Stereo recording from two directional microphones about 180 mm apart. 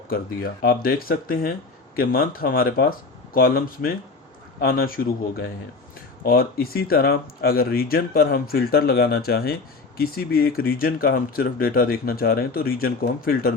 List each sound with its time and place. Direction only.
0.1 s speech: 55° left (ahead or behind)